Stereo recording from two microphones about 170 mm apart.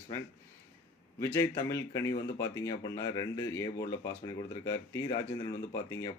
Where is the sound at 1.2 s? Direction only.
15° left (ahead or behind).